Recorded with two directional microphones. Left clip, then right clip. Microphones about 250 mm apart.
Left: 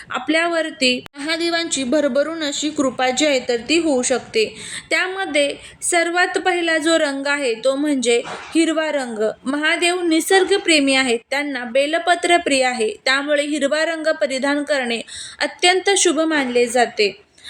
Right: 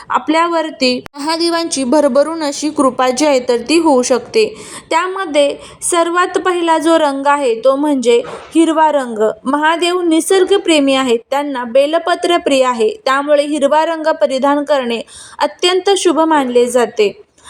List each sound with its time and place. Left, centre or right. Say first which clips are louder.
0.1 s a woman's voice: right 6 dB; centre